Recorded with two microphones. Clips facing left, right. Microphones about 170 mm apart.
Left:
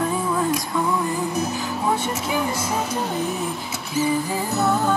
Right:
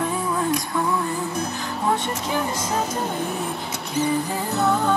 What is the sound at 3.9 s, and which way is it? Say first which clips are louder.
Music: left 1 dB; 5° left (ahead or behind).